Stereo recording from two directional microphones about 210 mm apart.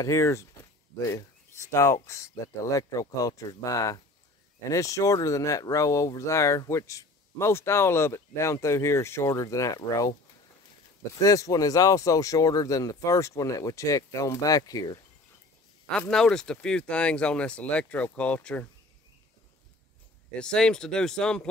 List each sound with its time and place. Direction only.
0.0 s speech: 15° left (ahead or behind)
11.1 s speech: 15° left (ahead or behind)
15.9 s speech: 5° left (ahead or behind)
20.3 s speech: 5° left (ahead or behind)